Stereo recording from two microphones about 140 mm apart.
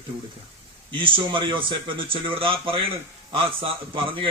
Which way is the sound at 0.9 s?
35° right (ahead or behind).